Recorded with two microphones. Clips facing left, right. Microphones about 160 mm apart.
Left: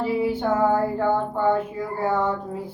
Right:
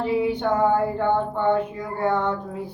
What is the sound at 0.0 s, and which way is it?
Music, 5° left (ahead or behind).